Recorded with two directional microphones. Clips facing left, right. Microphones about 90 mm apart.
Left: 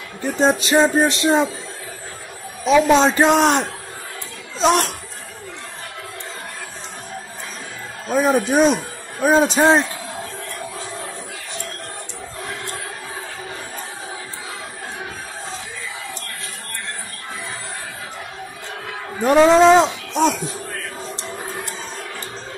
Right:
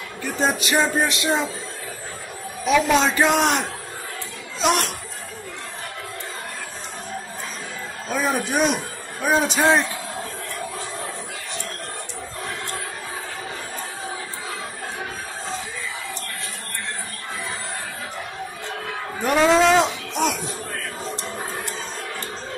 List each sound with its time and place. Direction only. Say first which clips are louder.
0.2 s speech: left 5 dB; 30° left (ahead or behind)
2.6 s a man's voice: left 4 dB; 30° left (ahead or behind)
8.1 s speech: left 6 dB; 30° left (ahead or behind)
9.6 s a man's voice: left 1 dB; 20° left (ahead or behind)
19.2 s a sound: left 5 dB; 30° left (ahead or behind)